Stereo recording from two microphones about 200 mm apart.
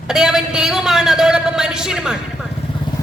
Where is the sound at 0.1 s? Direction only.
5° right (ahead or behind).